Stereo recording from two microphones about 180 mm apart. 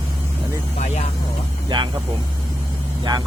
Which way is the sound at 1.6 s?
25° right (ahead or behind).